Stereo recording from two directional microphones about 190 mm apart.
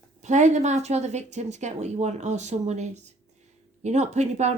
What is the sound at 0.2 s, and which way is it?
Speech, 40° right (ahead or behind).